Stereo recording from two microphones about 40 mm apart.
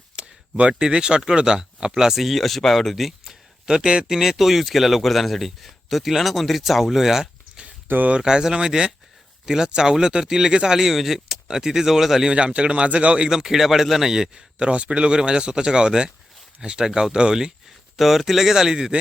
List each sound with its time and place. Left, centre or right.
0.2 s a sound: right
0.7 s speech: right
7.9 s speech: right
8.2 s speech: centre
12.3 s speech: right
13.2 s speech: centre
14.1 s speech: centre
17.9 s speech: centre